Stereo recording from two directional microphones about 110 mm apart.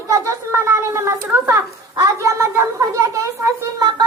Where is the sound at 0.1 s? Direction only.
25° right (ahead or behind).